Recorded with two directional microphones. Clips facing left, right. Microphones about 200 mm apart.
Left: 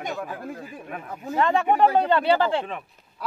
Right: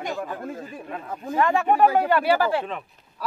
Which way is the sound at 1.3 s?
20° left (ahead or behind).